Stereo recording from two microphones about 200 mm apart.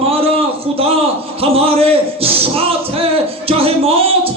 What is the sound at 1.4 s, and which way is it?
Singing, 30° right (ahead or behind).